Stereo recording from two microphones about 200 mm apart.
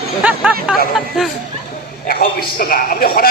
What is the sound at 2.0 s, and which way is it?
A man's voice, 45° left (ahead or behind).